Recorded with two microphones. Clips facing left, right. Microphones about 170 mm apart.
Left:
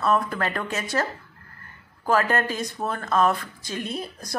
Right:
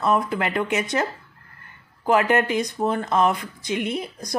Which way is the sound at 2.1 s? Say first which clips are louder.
Right 3 dB; 20° right (ahead or behind).